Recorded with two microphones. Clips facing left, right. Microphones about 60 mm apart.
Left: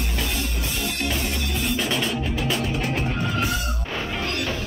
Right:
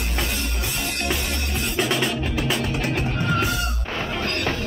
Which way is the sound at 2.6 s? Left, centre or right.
Right.